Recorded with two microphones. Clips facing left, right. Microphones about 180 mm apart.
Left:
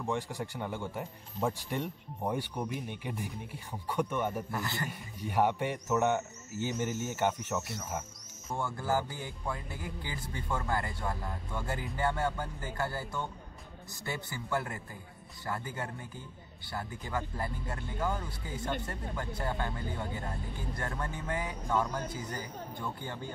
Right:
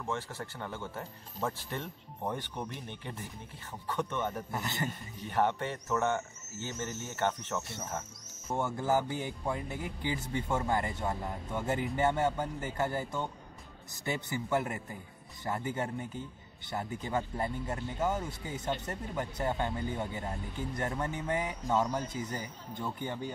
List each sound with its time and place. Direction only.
0.0 s speech: 15° left (ahead or behind)
4.5 s speech: 20° right (ahead or behind)
4.8 s speech: 10° left (ahead or behind)
8.5 s speech: 20° right (ahead or behind)